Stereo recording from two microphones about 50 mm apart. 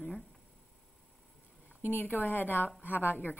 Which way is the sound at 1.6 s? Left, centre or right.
Left.